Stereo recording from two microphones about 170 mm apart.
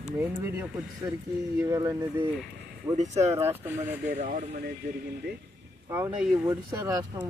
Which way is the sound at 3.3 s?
15° right (ahead or behind).